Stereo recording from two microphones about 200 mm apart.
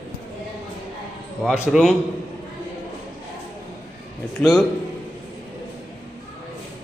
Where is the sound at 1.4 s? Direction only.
Centre (ahead or behind).